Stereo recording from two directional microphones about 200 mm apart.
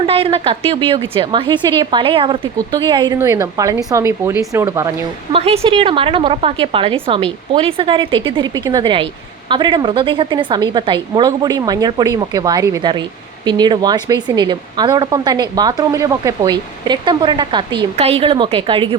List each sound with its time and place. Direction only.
0.0 s a woman's voice: 25° right (ahead or behind)